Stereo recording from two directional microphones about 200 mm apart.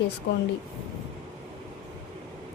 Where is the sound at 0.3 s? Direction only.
60° left (ahead or behind).